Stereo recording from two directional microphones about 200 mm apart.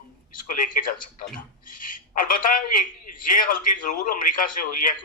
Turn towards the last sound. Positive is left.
turn(degrees=45)  # may be behind; listen again after turning